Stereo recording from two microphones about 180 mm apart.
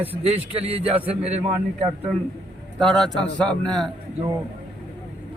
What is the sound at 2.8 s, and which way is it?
Speech, centre (ahead or behind).